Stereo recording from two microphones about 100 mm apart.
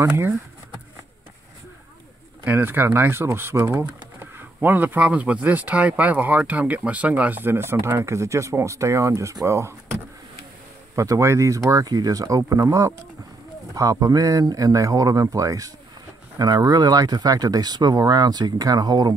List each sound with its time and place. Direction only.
2.4 s speech: 20° right (ahead or behind); by 19.1 s 45° right (ahead or behind)